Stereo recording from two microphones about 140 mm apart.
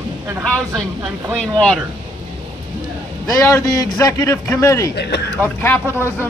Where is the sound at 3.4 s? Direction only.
20° left (ahead or behind).